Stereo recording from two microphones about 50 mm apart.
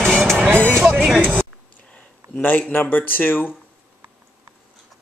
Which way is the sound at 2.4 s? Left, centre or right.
Left.